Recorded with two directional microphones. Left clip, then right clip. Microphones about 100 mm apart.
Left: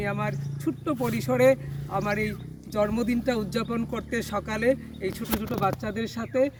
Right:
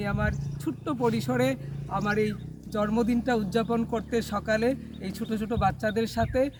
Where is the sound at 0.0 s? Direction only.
25° right (ahead or behind).